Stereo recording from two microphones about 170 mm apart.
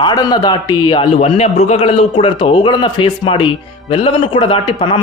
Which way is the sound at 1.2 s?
40° left (ahead or behind).